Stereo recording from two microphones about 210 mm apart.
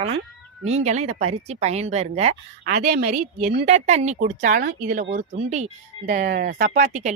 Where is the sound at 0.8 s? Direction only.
30° right (ahead or behind).